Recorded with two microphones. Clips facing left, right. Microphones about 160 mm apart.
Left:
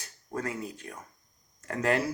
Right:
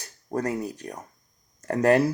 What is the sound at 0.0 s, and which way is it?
Speech, 40° right (ahead or behind).